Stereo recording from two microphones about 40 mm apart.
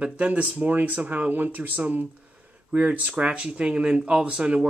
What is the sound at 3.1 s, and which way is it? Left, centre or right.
Speech, right.